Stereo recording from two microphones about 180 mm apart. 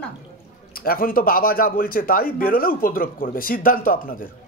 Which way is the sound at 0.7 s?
55° left (ahead or behind).